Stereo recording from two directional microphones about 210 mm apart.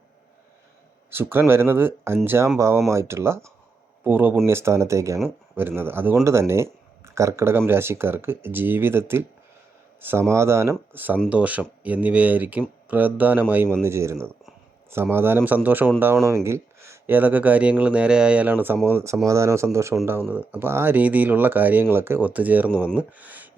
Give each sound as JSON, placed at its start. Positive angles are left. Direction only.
{"t": 1.1, "sound": "speech", "side_deg": -10}